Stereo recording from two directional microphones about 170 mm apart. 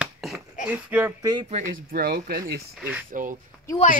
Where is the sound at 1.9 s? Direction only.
65° right (ahead or behind).